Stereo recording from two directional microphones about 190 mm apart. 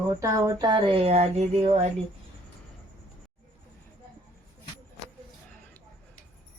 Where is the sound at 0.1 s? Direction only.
20° right (ahead or behind); by 1.9 s 35° right (ahead or behind).